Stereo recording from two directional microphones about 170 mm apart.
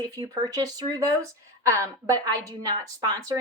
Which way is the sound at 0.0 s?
20° right (ahead or behind).